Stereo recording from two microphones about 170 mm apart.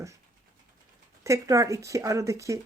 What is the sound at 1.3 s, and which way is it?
Speech, 20° right (ahead or behind).